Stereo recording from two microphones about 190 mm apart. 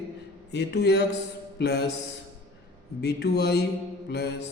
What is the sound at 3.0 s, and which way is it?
Speech, 60° left (ahead or behind).